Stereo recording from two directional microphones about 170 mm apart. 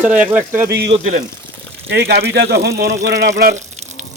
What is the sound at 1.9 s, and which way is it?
Speech, 75° right (ahead or behind).